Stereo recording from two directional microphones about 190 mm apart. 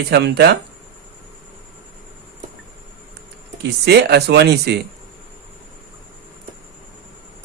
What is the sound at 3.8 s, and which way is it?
Speech, 60° right (ahead or behind).